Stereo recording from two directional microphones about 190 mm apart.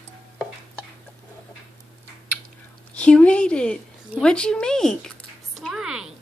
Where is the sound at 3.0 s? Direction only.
5° left (ahead or behind).